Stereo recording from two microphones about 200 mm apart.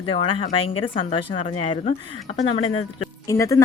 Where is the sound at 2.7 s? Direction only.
90° left.